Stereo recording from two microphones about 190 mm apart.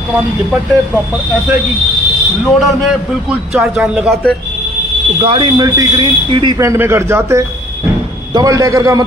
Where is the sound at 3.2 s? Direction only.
5° right (ahead or behind).